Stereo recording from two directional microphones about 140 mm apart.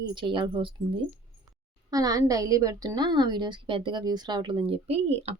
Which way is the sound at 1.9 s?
25° right (ahead or behind).